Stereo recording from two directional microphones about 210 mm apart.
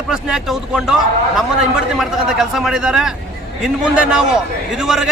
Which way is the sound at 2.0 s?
Centre (ahead or behind).